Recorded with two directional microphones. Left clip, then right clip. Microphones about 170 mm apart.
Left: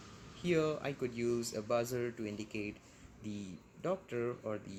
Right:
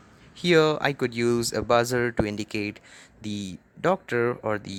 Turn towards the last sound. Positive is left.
turn(degrees=-70)  # may be behind; listen again after turning